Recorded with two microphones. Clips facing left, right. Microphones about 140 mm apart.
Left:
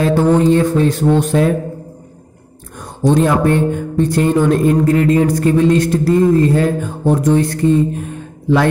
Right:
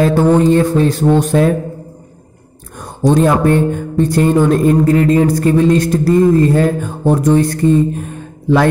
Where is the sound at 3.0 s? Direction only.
40° right (ahead or behind).